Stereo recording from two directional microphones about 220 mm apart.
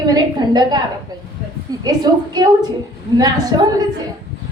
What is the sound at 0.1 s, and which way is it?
Speech, 20° right (ahead or behind).